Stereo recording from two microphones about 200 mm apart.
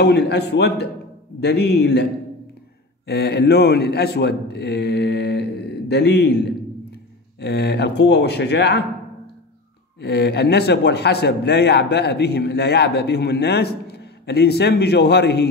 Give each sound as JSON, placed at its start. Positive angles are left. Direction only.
{"t": 0.0, "sound": "speech", "side_deg": 55}
{"t": 3.1, "sound": "a man's voice", "side_deg": 55}
{"t": 9.9, "sound": "speech", "side_deg": 55}